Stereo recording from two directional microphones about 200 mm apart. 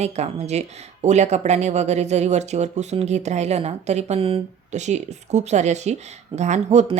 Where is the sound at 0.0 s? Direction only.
35° right (ahead or behind).